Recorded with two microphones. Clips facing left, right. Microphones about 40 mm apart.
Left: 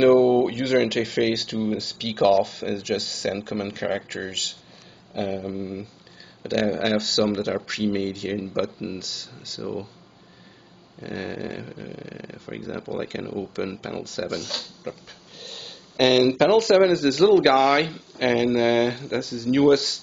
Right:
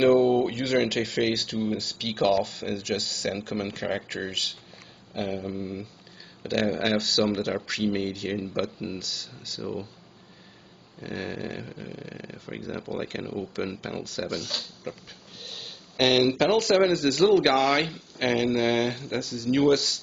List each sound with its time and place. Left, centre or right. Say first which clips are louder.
0.0 s speech: left 4 dB; centre
11.1 s speech: left 2 dB; centre